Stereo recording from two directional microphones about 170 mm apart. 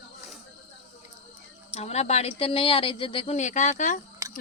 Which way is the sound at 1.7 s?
40° left (ahead or behind).